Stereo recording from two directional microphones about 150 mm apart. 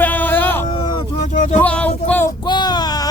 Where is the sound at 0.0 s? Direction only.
10° left (ahead or behind).